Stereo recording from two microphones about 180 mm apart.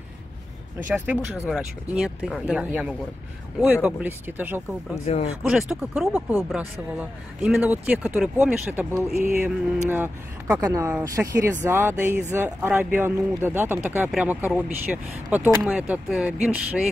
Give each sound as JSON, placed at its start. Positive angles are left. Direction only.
{"t": 1.0, "sound": "speech", "side_deg": 0}
{"t": 5.0, "sound": "speech", "side_deg": 35}
{"t": 5.4, "sound": "speech", "side_deg": -5}